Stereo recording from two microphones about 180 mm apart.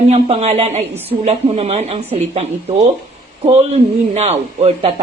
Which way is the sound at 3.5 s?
35° right (ahead or behind).